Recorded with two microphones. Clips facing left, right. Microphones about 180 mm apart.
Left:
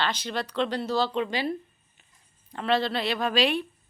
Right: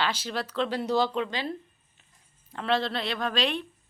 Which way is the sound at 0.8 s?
15° right (ahead or behind).